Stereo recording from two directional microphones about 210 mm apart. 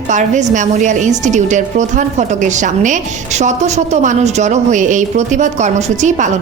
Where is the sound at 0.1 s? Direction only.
35° right (ahead or behind).